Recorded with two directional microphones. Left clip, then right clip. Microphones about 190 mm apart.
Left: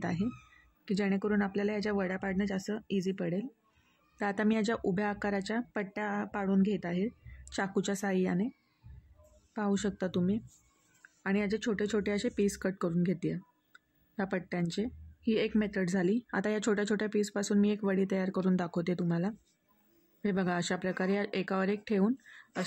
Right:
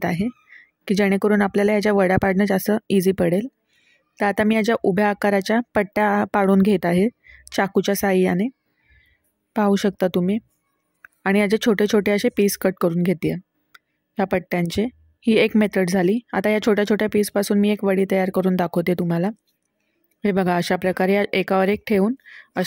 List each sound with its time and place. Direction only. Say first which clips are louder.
0.0 s speech: right 12 dB; 30° right (ahead or behind)
4.2 s speech: right 12 dB; 30° right (ahead or behind)